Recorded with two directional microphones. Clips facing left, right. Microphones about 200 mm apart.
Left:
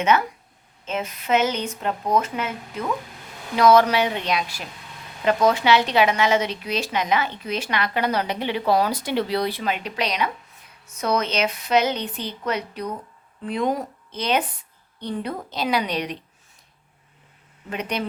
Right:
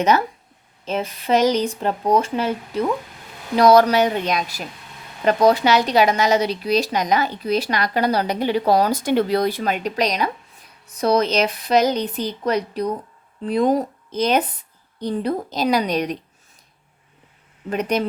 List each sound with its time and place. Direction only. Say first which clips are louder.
0.0 s a woman's voice: right 2 dB; 35° right (ahead or behind)
17.7 s speech: right 6 dB; 40° right (ahead or behind)